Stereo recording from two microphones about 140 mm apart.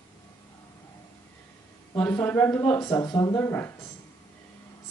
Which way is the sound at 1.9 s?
15° left (ahead or behind).